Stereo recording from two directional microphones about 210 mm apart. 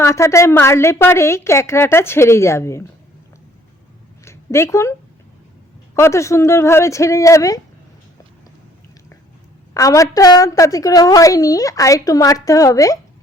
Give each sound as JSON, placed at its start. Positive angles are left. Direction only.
{"t": 0.0, "sound": "a woman's voice", "side_deg": 15}
{"t": 4.3, "sound": "speech", "side_deg": 15}
{"t": 6.0, "sound": "a woman's voice", "side_deg": 15}
{"t": 9.7, "sound": "a woman's voice", "side_deg": 15}